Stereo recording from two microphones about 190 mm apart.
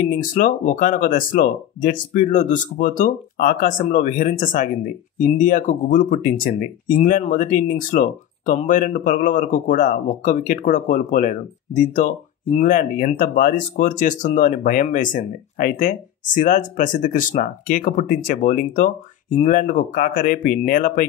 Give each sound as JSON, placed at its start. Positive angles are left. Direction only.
{"t": 0.0, "sound": "speech", "side_deg": 45}